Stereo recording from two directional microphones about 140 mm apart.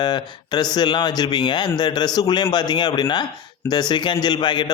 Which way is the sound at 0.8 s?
30° left (ahead or behind).